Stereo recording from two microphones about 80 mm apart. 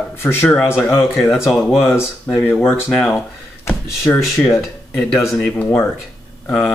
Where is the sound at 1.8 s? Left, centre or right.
Left.